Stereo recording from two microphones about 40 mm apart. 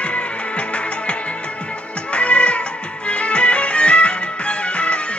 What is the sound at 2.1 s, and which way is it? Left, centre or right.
Music, left.